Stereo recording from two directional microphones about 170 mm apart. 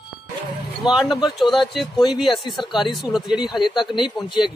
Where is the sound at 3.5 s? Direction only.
25° left (ahead or behind).